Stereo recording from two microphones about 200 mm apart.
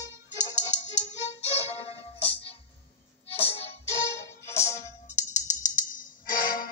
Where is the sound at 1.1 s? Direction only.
35° left (ahead or behind).